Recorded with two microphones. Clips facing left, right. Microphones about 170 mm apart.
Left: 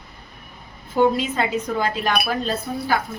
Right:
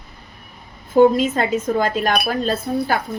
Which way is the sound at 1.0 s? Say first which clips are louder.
Right 5 dB; 45° right (ahead or behind).